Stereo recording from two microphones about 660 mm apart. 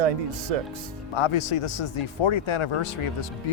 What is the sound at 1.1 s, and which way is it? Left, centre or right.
A man's voice, left.